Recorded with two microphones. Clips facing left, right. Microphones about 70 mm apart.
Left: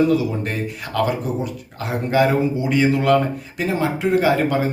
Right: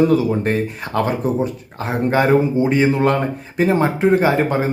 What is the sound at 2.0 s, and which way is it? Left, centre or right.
A man's voice, right.